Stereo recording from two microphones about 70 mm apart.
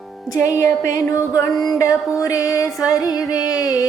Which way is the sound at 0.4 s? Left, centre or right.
Left.